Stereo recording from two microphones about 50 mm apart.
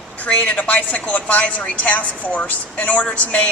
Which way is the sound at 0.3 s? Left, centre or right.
Left.